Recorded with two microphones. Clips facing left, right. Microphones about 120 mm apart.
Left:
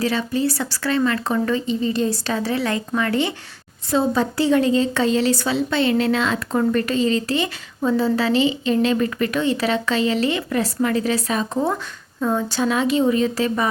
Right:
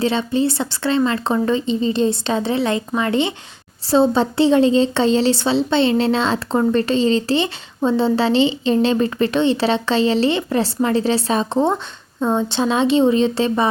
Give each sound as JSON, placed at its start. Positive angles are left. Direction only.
{"t": 0.0, "sound": "a woman's voice", "side_deg": -25}